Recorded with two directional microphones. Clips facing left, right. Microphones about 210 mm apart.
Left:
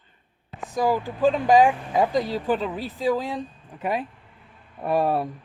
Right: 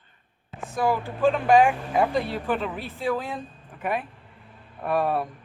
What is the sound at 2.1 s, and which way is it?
Speech, 35° left (ahead or behind).